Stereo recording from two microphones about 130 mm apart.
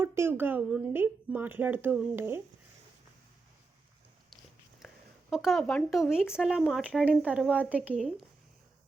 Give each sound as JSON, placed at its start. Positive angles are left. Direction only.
{"t": 0.0, "sound": "a woman's voice", "side_deg": -20}
{"t": 4.8, "sound": "a sound", "side_deg": 0}
{"t": 5.3, "sound": "speech", "side_deg": 0}